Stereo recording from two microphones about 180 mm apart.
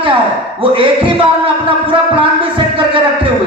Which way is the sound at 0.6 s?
30° right (ahead or behind).